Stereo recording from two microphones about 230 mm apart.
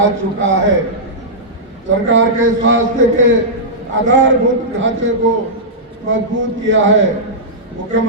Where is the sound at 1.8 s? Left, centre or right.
Right.